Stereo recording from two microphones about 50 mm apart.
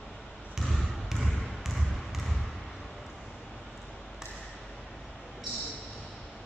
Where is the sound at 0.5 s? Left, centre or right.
Centre.